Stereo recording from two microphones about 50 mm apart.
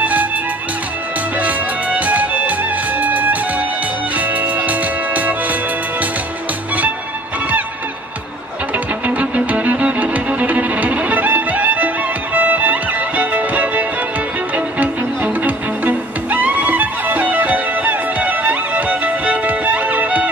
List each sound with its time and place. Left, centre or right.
0.0 s music: right
1.4 s music: right
8.7 s music: right